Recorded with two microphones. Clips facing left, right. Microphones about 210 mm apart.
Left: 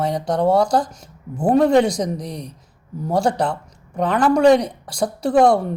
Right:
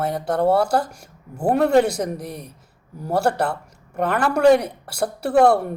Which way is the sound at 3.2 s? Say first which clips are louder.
Left 1 dB; 60° right (ahead or behind).